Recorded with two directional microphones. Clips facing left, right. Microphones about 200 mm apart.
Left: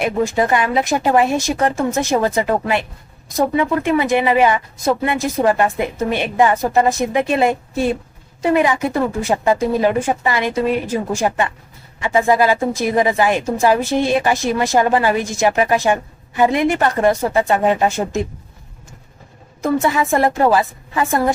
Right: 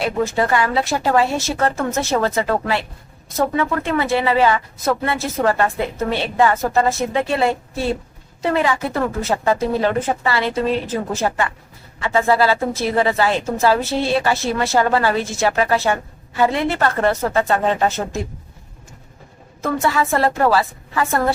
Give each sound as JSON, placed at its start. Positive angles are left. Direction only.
{"t": 0.0, "sound": "a woman's voice", "side_deg": 15}
{"t": 19.6, "sound": "a woman's voice", "side_deg": 15}